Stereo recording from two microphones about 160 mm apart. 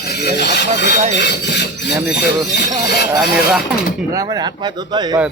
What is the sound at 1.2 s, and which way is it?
Filing, 90° left.